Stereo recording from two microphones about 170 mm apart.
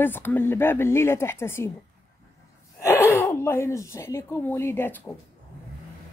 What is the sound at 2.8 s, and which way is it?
Speech, 15° left (ahead or behind).